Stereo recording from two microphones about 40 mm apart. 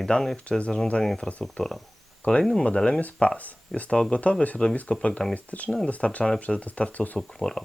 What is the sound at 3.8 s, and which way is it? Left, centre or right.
Speech, centre.